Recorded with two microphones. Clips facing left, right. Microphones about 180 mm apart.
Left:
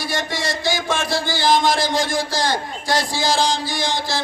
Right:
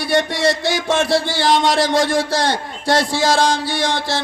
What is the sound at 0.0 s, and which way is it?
Speech, 65° right (ahead or behind).